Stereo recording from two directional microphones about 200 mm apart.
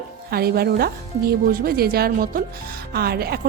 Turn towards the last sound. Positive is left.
turn(degrees=-50)  # may be behind; listen again after turning